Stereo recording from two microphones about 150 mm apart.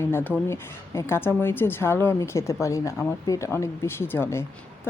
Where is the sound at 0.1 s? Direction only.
15° left (ahead or behind).